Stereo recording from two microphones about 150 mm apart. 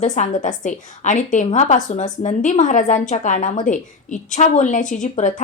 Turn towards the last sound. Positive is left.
turn(degrees=55)  # may be behind; listen again after turning